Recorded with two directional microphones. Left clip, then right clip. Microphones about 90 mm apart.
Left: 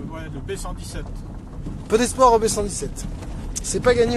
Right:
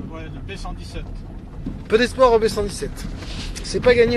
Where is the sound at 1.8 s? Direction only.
45° left (ahead or behind).